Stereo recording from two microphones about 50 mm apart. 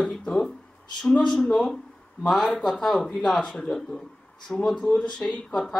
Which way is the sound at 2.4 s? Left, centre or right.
Centre.